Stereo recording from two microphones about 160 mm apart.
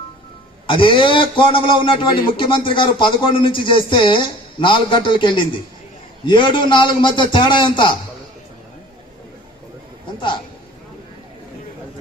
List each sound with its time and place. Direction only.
0.7 s a man's voice: 30° left (ahead or behind)